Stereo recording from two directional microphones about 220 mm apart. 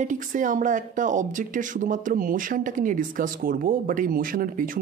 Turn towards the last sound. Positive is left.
turn(degrees=-40)  # may be behind; listen again after turning